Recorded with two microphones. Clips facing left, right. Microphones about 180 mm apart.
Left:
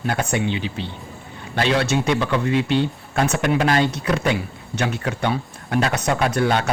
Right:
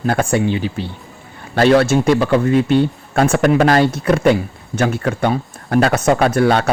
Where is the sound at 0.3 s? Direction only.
45° right (ahead or behind).